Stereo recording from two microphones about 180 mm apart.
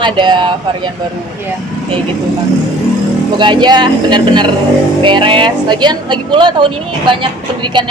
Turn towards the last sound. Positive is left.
turn(degrees=-25)  # may be behind; listen again after turning